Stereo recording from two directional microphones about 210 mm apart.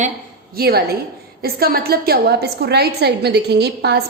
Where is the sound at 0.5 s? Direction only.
45° right (ahead or behind).